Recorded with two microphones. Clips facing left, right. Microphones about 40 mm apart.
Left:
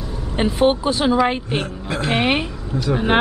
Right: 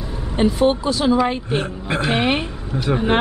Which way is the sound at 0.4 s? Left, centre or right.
Left.